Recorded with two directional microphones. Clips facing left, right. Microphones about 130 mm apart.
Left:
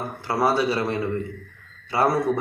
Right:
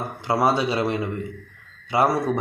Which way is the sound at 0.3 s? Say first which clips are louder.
Right 1 dB; 15° right (ahead or behind).